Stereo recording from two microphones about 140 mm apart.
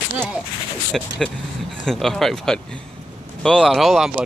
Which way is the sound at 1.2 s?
Centre (ahead or behind).